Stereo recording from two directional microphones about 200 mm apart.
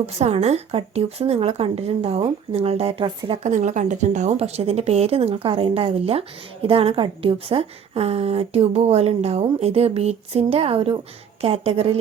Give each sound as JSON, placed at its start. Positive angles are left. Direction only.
{"t": 0.0, "sound": "a woman's voice", "side_deg": -30}